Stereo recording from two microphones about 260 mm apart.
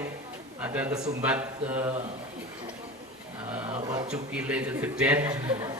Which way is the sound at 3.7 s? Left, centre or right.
Centre.